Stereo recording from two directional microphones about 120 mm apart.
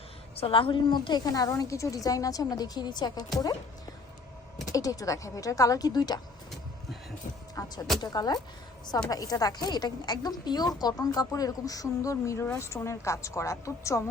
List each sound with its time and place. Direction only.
0.3 s a woman's voice: 50° left (ahead or behind)
4.7 s a woman's voice: 30° left (ahead or behind)
7.5 s music: 30° left (ahead or behind)
8.0 s a woman's voice: 35° left (ahead or behind)